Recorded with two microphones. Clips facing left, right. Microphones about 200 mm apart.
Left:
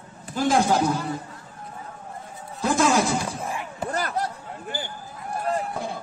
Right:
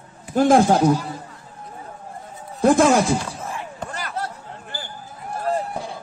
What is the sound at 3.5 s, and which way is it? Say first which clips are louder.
Chop: even; 15° left (ahead or behind).